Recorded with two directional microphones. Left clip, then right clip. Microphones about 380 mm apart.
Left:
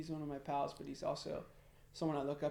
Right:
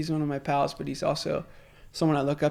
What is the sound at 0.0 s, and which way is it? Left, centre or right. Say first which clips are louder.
Speech: right 15 dB; right.